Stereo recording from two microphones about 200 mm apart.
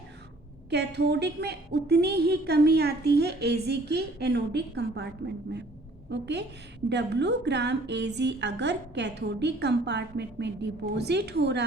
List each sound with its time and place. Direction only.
0.7 s a woman's voice: 55° right (ahead or behind)
6.1 s a woman's voice: 60° right (ahead or behind)